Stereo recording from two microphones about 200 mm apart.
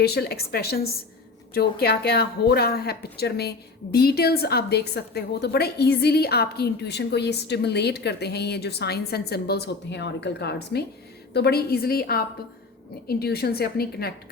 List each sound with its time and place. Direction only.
0.0 s a woman's voice: 55° left (ahead or behind)